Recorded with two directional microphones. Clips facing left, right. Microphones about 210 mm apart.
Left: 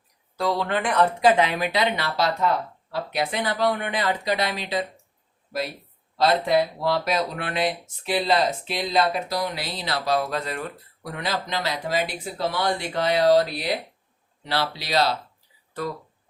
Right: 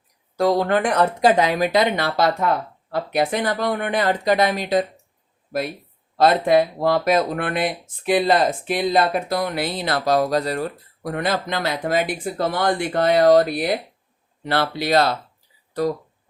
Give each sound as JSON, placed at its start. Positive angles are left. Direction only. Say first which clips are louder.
{"t": 0.3, "sound": "speech", "louder": "right 6 dB", "side_deg": -45}
{"t": 11.1, "sound": "speech", "louder": "right 5 dB", "side_deg": -50}
{"t": 15.8, "sound": "speech", "louder": "right 8 dB", "side_deg": -40}